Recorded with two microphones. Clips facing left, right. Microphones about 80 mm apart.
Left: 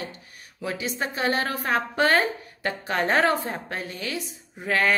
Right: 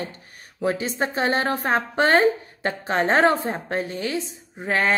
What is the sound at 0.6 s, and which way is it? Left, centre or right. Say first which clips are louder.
A woman's voice: right 6 dB; right.